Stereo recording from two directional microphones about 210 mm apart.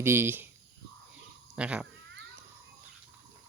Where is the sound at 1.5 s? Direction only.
5° right (ahead or behind).